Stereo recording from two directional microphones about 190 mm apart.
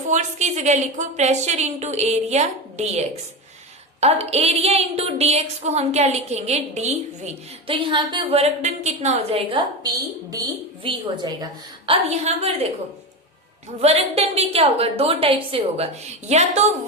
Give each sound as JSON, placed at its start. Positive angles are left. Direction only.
{"t": 0.1, "sound": "speech", "side_deg": -40}
{"t": 4.3, "sound": "a woman's voice", "side_deg": -35}
{"t": 11.9, "sound": "speech", "side_deg": -35}
{"t": 13.8, "sound": "speech", "side_deg": -35}